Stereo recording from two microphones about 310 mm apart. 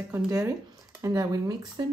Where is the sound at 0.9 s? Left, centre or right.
Centre.